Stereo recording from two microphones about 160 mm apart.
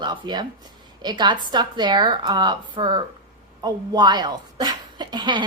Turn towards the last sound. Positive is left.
turn(degrees=-30)  # may be behind; listen again after turning